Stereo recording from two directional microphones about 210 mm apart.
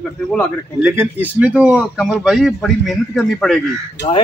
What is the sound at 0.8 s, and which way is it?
A man's voice, 10° right (ahead or behind).